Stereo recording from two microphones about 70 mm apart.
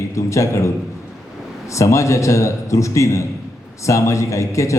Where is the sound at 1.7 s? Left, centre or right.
Left.